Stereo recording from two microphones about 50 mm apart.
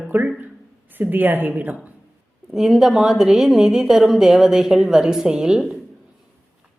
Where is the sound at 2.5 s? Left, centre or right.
Centre.